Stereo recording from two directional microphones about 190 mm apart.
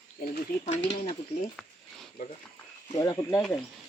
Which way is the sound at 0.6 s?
35° left (ahead or behind).